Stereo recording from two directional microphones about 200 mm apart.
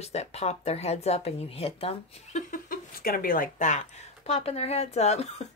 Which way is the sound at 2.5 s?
45° left (ahead or behind).